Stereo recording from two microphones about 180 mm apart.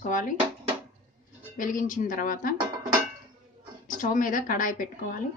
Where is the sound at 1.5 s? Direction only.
50° left (ahead or behind).